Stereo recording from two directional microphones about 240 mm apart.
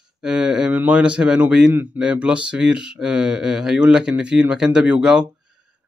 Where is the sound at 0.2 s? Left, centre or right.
Centre.